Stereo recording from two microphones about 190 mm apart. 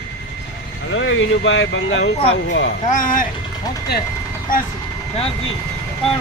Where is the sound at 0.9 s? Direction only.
85° left; by 2.8 s 65° left (ahead or behind).